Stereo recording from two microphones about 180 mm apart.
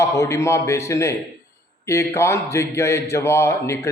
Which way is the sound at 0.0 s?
15° left (ahead or behind).